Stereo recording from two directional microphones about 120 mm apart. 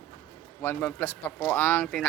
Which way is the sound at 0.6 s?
20° left (ahead or behind).